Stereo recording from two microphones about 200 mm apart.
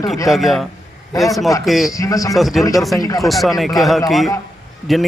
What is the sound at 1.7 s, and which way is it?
Speech, centre (ahead or behind).